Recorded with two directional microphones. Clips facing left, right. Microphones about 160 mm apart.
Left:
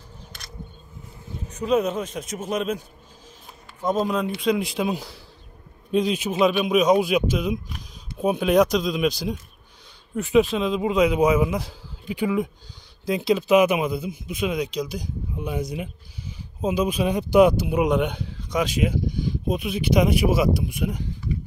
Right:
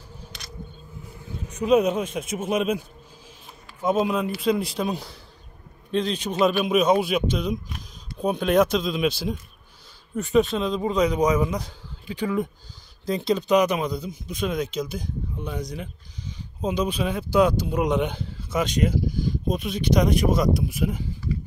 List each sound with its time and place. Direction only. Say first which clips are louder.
1.5 s a man's voice: right 2 dB; 10° right (ahead or behind)
3.8 s a man's voice: right 1 dB; 5° right (ahead or behind)
15.3 s speech: left 6 dB; 10° left (ahead or behind)